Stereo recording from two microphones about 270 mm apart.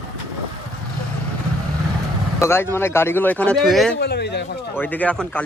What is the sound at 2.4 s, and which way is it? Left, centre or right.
Speech, centre.